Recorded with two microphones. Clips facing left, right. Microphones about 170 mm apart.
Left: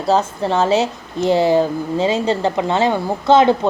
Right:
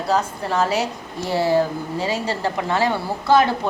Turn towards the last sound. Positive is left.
turn(degrees=20)  # may be behind; listen again after turning